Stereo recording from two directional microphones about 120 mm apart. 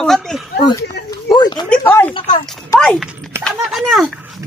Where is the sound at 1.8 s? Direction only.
20° left (ahead or behind).